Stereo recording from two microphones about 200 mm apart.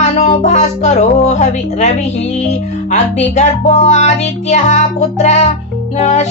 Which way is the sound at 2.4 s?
35° left (ahead or behind).